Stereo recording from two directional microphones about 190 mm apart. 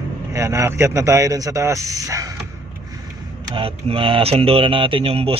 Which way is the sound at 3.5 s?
30° right (ahead or behind).